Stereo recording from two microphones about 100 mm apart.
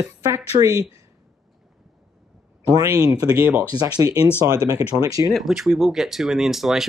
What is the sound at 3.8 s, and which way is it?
Speech, 40° right (ahead or behind).